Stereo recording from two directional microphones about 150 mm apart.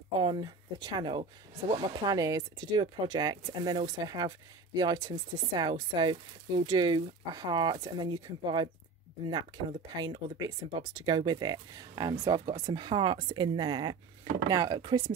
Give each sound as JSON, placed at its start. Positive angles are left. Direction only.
{"t": 0.2, "sound": "speech", "side_deg": -30}
{"t": 10.0, "sound": "speech", "side_deg": -25}